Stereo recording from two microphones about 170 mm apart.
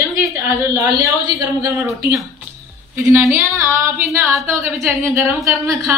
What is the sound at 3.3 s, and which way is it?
A woman's voice, 15° right (ahead or behind).